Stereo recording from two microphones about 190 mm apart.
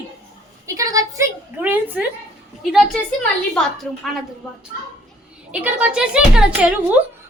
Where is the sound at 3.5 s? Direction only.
Centre (ahead or behind).